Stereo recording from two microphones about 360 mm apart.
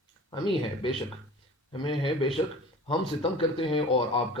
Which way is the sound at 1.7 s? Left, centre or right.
Centre.